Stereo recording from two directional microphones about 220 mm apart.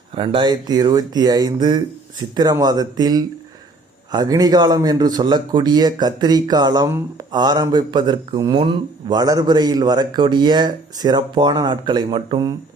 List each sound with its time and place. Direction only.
0.2 s speech: 25° right (ahead or behind)